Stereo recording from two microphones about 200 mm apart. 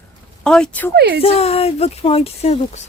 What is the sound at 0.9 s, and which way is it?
Speech, 55° right (ahead or behind).